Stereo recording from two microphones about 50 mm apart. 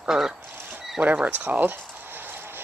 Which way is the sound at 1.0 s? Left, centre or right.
Right.